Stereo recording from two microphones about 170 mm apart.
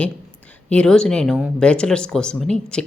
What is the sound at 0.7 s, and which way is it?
Speech, 5° left (ahead or behind).